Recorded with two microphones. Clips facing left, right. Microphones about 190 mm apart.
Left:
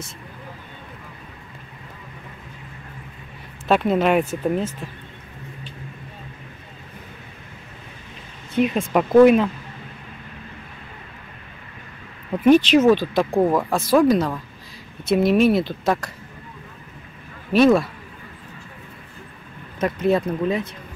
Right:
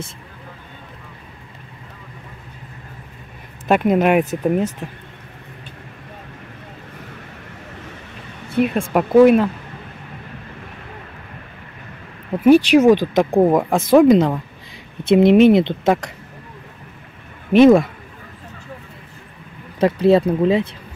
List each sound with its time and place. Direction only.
3.6 s speech: 10° right (ahead or behind)
8.6 s speech: 50° right (ahead or behind)
8.9 s speech: 5° right (ahead or behind)
12.4 s speech: 10° right (ahead or behind)
17.5 s speech: 20° right (ahead or behind)
19.8 s speech: 30° right (ahead or behind)